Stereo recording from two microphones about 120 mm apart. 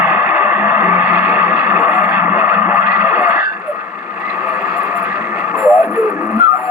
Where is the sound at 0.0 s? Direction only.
20° right (ahead or behind).